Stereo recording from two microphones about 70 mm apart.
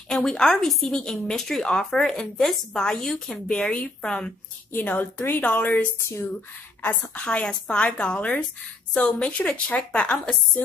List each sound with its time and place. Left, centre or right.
0.1 s speech: centre
4.7 s a woman's voice: left
5.9 s speech: left
6.8 s a woman's voice: left